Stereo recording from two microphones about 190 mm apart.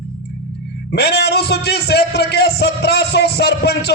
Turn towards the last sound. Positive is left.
turn(degrees=60)  # may be behind; listen again after turning